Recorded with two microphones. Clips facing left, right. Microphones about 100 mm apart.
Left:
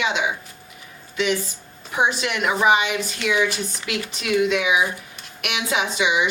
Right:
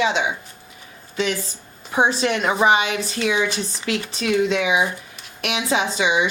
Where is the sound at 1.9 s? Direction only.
35° right (ahead or behind).